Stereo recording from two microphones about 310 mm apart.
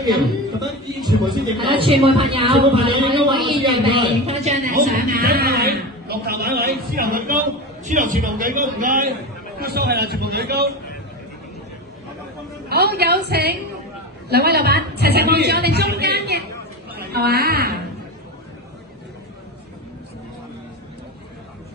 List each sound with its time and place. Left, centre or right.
1.2 s a man's voice: centre; by 10.7 s right
12.6 s a woman's voice: right